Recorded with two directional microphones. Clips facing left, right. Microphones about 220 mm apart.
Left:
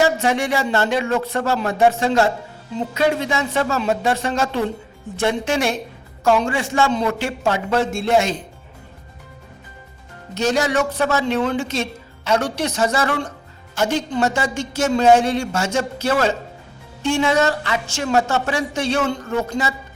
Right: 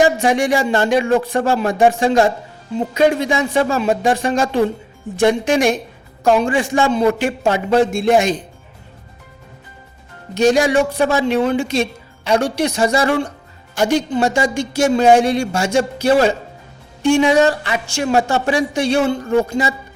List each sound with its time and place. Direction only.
0.0 s speech: 15° right (ahead or behind)
10.3 s speech: 15° right (ahead or behind)